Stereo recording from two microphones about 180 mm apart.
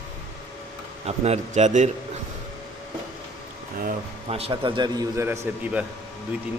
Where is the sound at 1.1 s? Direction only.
35° right (ahead or behind).